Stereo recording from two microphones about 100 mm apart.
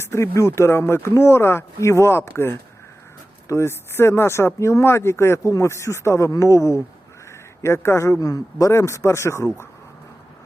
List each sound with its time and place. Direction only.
0.0 s speech: 25° left (ahead or behind)